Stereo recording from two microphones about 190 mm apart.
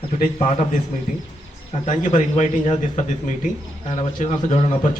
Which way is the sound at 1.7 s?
40° left (ahead or behind).